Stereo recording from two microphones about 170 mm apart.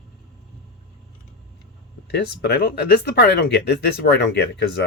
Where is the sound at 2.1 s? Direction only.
75° left (ahead or behind).